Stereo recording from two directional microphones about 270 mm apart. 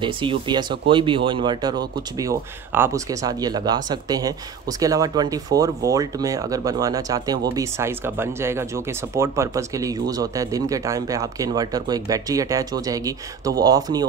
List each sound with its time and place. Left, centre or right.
0.0 s speech: centre